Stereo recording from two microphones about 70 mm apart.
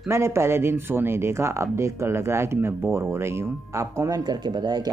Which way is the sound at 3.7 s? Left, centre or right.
Right.